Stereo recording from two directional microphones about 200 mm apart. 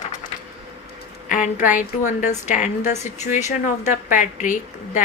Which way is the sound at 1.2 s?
40° left (ahead or behind).